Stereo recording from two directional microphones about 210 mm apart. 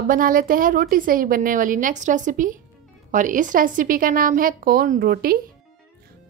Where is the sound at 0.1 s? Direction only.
40° right (ahead or behind).